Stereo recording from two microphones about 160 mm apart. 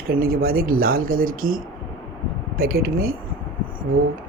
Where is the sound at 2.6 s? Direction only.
65° right (ahead or behind).